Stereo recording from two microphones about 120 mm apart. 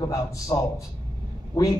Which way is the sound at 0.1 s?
30° left (ahead or behind).